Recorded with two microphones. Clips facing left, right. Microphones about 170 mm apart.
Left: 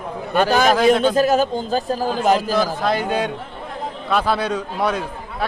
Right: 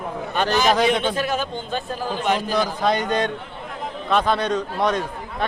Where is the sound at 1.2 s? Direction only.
40° left (ahead or behind).